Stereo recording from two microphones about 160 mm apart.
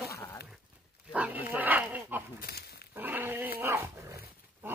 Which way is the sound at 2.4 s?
75° left (ahead or behind).